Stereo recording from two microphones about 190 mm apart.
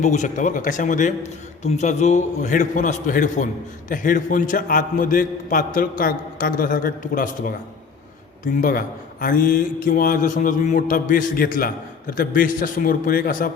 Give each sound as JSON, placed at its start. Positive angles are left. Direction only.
{"t": 0.0, "sound": "a man's voice", "side_deg": 40}
{"t": 9.2, "sound": "a man's voice", "side_deg": 50}